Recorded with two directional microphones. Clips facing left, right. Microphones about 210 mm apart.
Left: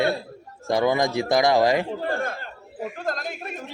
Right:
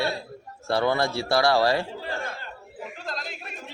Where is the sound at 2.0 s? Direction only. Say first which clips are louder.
Left 6 dB; 50° left (ahead or behind).